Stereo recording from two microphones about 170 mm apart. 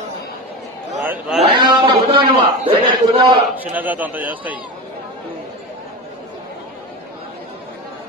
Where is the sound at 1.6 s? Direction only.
25° right (ahead or behind).